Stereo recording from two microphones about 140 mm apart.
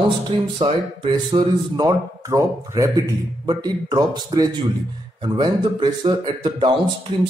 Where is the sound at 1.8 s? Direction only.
25° right (ahead or behind).